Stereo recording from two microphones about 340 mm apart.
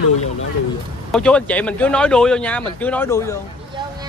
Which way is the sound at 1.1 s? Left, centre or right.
Centre.